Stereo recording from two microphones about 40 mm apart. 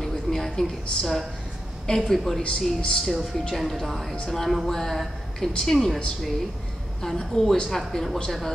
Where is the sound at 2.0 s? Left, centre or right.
Centre.